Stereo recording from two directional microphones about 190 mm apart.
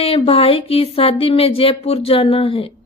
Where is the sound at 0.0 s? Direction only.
30° left (ahead or behind).